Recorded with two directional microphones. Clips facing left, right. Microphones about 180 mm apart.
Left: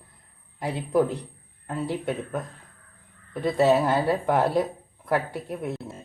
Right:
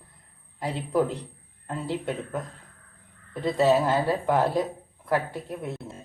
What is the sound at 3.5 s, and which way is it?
Speech, 15° left (ahead or behind).